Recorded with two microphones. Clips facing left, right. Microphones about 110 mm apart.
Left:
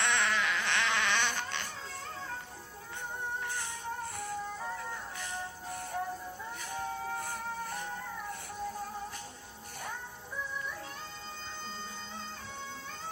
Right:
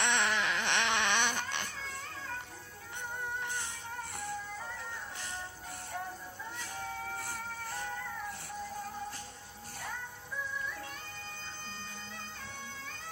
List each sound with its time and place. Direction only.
0.0 s baby cry: 20° right (ahead or behind)